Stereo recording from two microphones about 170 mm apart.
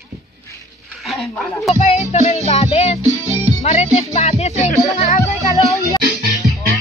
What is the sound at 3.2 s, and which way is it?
Music, 40° right (ahead or behind).